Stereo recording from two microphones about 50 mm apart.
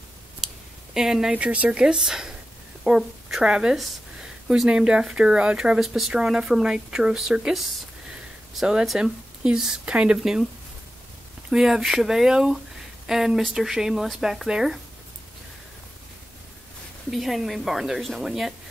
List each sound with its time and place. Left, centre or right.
0.9 s speech: centre
1.3 s speech: right
1.8 s a woman's voice: centre
3.4 s speech: centre
5.8 s a woman's voice: centre
11.5 s speech: centre
17.1 s a woman's voice: centre